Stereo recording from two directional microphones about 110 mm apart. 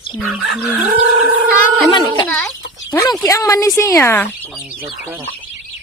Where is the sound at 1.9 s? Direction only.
50° left (ahead or behind).